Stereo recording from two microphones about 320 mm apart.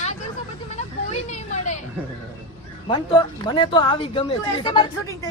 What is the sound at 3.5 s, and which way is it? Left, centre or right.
A woman's voice, centre.